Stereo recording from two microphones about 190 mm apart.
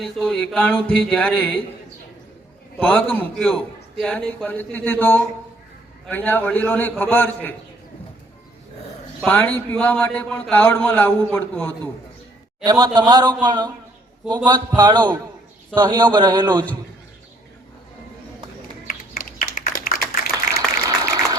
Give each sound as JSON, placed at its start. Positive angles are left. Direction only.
{"t": 0.0, "sound": "a man's voice", "side_deg": 0}
{"t": 2.7, "sound": "a man's voice", "side_deg": 10}
{"t": 9.2, "sound": "a man's voice", "side_deg": 10}
{"t": 12.6, "sound": "a man's voice", "side_deg": -20}
{"t": 18.9, "sound": "a sound", "side_deg": 45}